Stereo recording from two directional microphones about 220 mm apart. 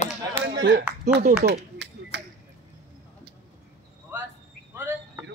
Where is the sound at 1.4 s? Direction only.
50° right (ahead or behind).